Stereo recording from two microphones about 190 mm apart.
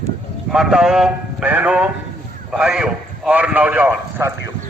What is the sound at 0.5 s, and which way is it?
A man's voice, centre (ahead or behind).